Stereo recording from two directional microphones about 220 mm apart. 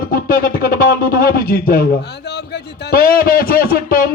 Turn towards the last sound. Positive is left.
turn(degrees=40)  # may be behind; listen again after turning